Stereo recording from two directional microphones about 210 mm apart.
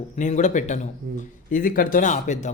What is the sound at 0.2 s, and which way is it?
Speech, 35° left (ahead or behind).